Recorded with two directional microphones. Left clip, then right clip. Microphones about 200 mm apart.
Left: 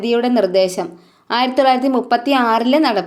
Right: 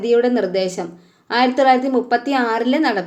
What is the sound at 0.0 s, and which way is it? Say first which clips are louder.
A woman's voice: even; 25° left (ahead or behind).